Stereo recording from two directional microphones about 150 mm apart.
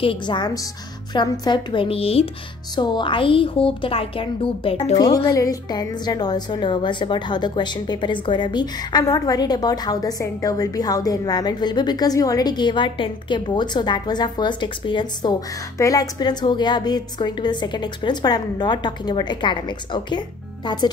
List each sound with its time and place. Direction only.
0.0 s speech: 35° left (ahead or behind)
2.7 s speech: 30° left (ahead or behind)
4.9 s a woman's voice: 25° left (ahead or behind)